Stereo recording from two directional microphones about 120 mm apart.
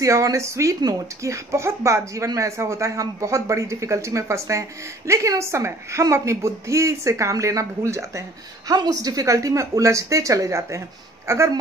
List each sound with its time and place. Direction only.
0.0 s speech: 25° right (ahead or behind)